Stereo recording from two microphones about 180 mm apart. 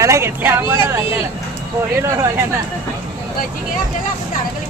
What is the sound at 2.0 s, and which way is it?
Speech, 15° right (ahead or behind).